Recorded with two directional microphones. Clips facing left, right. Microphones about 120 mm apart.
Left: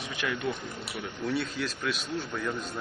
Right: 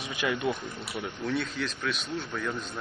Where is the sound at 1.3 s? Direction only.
5° left (ahead or behind).